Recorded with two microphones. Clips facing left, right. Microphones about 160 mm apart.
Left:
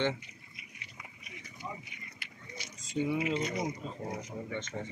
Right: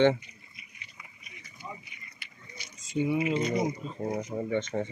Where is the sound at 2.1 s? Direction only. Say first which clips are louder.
Left 3 dB; 90° left.